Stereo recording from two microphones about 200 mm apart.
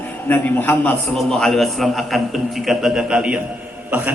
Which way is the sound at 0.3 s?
10° left (ahead or behind).